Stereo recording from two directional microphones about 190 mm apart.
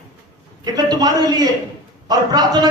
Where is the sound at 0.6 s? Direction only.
20° right (ahead or behind).